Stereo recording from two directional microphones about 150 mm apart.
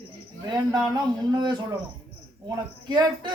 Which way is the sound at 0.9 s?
30° right (ahead or behind).